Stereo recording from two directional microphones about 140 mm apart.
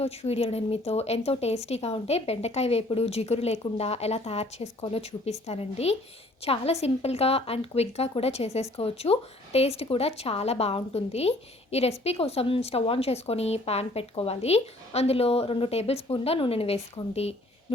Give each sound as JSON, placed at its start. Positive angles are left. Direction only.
{"t": 0.0, "sound": "speech", "side_deg": 45}